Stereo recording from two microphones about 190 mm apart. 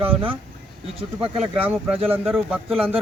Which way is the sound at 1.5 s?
5° right (ahead or behind).